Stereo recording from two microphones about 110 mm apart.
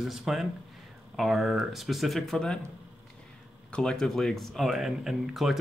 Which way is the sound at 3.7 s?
5° left (ahead or behind).